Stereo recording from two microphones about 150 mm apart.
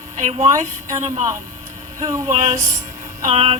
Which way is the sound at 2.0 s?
20° right (ahead or behind).